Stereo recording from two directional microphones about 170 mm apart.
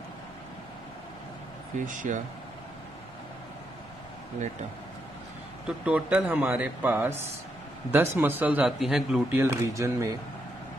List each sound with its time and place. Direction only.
1.8 s speech: 50° right (ahead or behind)
5.7 s speech: 5° right (ahead or behind)
9.4 s speech: 15° right (ahead or behind)